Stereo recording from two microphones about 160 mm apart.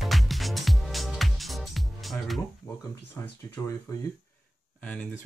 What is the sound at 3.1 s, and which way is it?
Speech, 15° left (ahead or behind).